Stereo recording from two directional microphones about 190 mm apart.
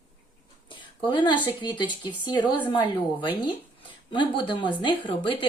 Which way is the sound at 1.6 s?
25° left (ahead or behind).